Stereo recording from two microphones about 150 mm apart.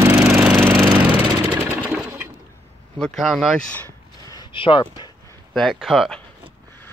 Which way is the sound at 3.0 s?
Centre (ahead or behind).